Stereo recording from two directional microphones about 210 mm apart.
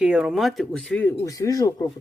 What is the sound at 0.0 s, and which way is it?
Speech, 5° right (ahead or behind).